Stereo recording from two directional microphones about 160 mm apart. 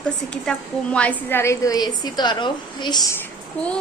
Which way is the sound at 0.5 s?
5° left (ahead or behind).